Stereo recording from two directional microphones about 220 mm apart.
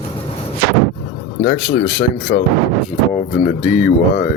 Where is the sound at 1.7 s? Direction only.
35° left (ahead or behind).